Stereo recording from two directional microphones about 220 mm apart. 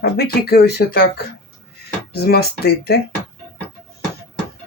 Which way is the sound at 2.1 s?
45° left (ahead or behind).